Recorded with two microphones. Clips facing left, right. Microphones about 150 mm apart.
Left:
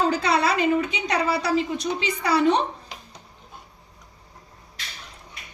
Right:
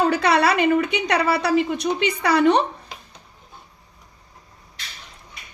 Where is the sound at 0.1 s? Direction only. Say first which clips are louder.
Right 3 dB; 70° right (ahead or behind).